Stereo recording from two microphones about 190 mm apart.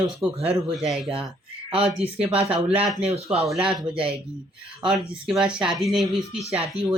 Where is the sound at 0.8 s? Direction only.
Centre (ahead or behind).